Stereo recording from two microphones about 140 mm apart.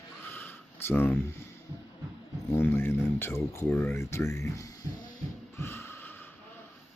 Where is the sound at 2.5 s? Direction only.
15° left (ahead or behind).